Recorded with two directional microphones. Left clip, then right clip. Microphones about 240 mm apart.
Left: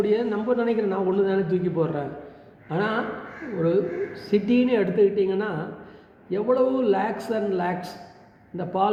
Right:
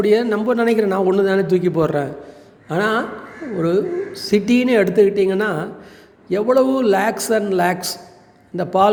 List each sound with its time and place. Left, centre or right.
0.0 s a man's voice: right